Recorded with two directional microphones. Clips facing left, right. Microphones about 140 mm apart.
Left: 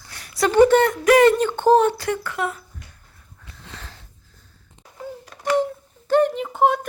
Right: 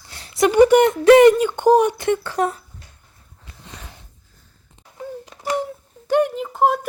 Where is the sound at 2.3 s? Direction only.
35° right (ahead or behind).